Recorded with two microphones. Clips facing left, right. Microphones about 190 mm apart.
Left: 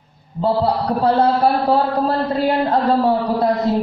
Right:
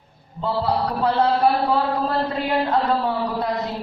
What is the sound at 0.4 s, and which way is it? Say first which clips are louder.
A man's voice: left 4 dB; 35° left (ahead or behind).